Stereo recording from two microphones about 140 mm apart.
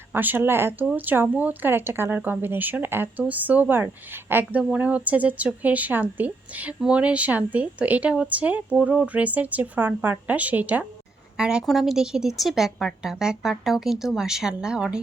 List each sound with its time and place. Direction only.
0.1 s speech: 15° right (ahead or behind)